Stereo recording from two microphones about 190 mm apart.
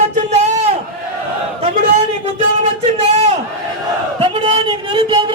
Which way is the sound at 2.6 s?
35° right (ahead or behind).